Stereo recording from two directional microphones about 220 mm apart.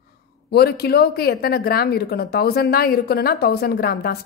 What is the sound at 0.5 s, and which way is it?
Speech, 45° left (ahead or behind).